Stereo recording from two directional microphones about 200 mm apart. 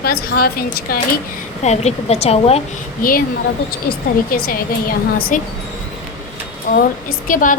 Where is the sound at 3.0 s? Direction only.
45° left (ahead or behind).